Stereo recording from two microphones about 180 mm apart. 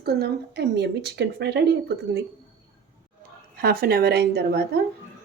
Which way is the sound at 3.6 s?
60° right (ahead or behind).